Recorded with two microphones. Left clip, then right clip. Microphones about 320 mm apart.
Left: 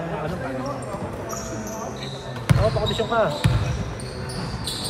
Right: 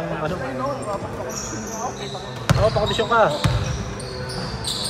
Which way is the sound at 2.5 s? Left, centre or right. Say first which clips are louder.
Right 4 dB; centre.